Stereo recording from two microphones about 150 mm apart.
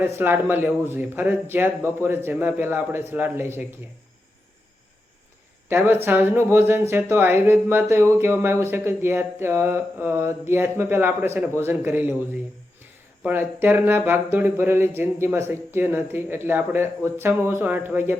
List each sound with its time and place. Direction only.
0.0 s speech: 15° right (ahead or behind)
5.6 s speech: 15° right (ahead or behind)
13.2 s speech: 15° right (ahead or behind)